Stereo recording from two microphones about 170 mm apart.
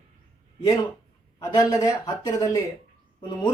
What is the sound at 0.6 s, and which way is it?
Speech, 25° left (ahead or behind).